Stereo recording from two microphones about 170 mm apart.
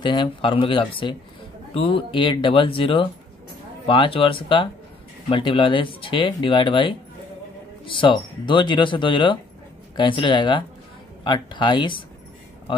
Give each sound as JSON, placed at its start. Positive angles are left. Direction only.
{"t": 0.0, "sound": "speech", "side_deg": 30}